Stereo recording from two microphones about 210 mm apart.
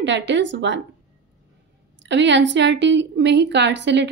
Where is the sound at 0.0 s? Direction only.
60° right (ahead or behind).